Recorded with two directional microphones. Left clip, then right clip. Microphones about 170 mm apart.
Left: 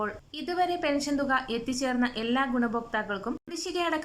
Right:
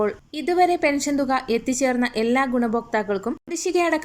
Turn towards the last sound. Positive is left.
turn(degrees=-20)  # may be behind; listen again after turning